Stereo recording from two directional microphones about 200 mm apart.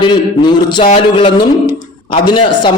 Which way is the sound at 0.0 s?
20° left (ahead or behind).